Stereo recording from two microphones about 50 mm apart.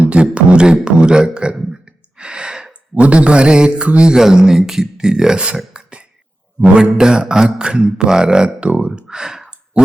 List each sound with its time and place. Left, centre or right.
0.0 s speech: right
1.7 s sigh: centre
2.9 s mantra: right
5.5 s a sound: centre
6.7 s mantra: centre
8.4 s speech: right; by 9.6 s centre